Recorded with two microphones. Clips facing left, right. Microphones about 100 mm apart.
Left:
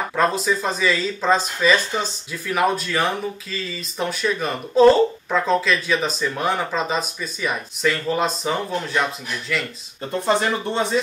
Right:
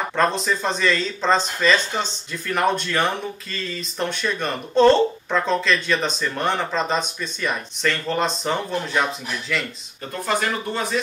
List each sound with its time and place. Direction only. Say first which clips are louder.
0.1 s speech: left 1 dB; 5° left (ahead or behind)
10.2 s speech: left 3 dB; 25° left (ahead or behind)